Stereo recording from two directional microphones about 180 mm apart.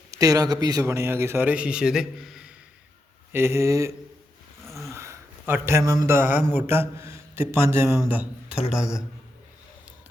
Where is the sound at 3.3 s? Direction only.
15° right (ahead or behind).